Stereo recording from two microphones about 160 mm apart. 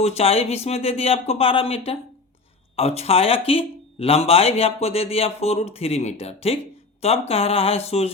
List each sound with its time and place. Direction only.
0.0 s speech: 40° left (ahead or behind)